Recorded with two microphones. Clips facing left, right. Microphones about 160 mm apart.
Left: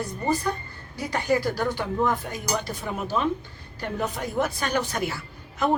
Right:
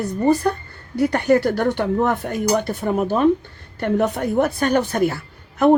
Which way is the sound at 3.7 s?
65° right (ahead or behind).